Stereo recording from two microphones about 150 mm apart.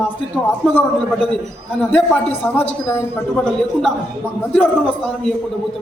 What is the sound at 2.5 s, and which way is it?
Speech, 15° left (ahead or behind).